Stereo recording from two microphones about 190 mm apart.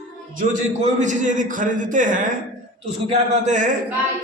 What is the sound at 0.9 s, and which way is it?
A man's voice, 40° right (ahead or behind).